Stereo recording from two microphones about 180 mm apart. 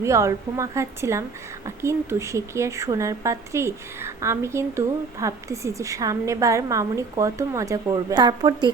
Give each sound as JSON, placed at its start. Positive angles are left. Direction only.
{"t": 0.0, "sound": "a woman's voice", "side_deg": -15}